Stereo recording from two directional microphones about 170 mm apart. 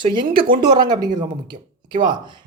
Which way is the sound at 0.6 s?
25° right (ahead or behind).